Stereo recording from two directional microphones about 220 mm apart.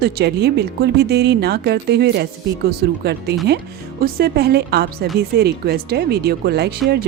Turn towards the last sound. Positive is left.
turn(degrees=-45)  # may be behind; listen again after turning